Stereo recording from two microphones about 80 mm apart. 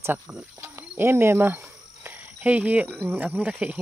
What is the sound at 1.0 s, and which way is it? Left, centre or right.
Cricket, right.